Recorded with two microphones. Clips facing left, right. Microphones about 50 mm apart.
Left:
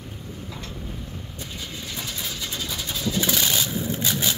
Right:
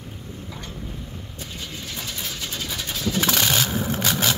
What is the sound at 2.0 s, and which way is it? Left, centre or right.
Vehicle, centre.